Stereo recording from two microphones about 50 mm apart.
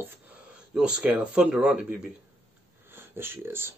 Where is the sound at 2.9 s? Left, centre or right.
Right.